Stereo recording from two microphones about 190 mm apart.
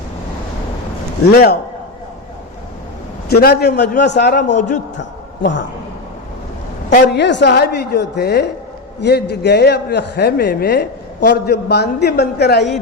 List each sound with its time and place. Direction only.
1.3 s a man's voice: 55° left (ahead or behind)
3.2 s a man's voice: 55° left (ahead or behind)
4.5 s a man's voice: 40° left (ahead or behind)
7.1 s a man's voice: 65° left (ahead or behind)